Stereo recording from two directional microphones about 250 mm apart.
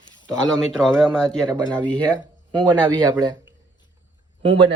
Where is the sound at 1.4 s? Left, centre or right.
Centre.